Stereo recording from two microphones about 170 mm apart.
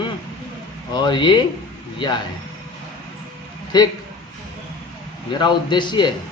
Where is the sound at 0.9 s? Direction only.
25° left (ahead or behind).